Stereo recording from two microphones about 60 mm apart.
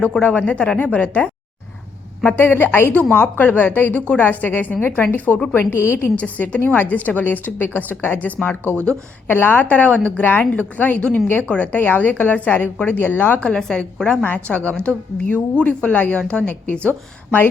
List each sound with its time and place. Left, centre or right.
0.2 s a woman's voice: left
5.7 s a woman's voice: left
6.1 s a woman's voice: left
8.7 s speech: right
9.2 s a woman's voice: left
13.4 s a woman's voice: centre
14.2 s a woman's voice: left